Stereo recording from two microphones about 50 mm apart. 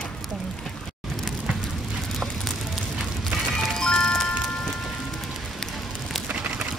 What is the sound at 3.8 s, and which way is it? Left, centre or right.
Music, centre.